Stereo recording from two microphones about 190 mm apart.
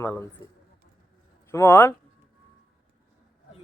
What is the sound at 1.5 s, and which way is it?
Speech, 15° left (ahead or behind).